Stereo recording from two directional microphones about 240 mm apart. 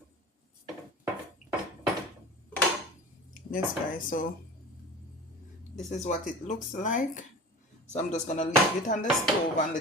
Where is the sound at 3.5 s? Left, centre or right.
Left.